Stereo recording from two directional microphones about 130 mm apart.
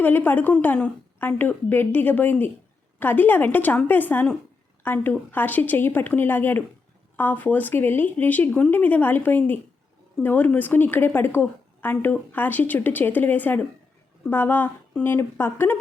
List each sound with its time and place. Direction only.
0.0 s a woman's voice: 15° left (ahead or behind)